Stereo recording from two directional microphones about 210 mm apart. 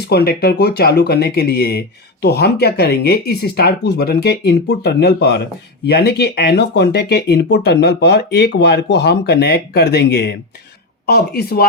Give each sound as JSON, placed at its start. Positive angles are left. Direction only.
{"t": 0.1, "sound": "speech", "side_deg": 50}